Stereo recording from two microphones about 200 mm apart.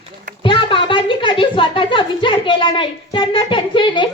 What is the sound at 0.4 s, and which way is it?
A woman's voice, 25° left (ahead or behind).